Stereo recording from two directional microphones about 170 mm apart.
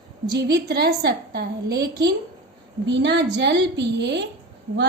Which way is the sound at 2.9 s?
90° right.